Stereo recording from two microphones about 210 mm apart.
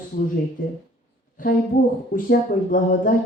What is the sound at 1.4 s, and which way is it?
A man's voice, 40° left (ahead or behind).